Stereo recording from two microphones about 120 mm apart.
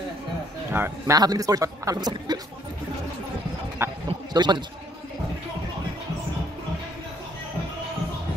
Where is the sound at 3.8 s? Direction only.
20° right (ahead or behind).